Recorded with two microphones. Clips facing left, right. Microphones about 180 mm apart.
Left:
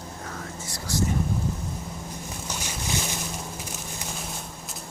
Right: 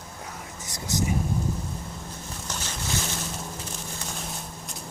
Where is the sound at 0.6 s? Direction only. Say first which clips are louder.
Right 1 dB; 20° right (ahead or behind).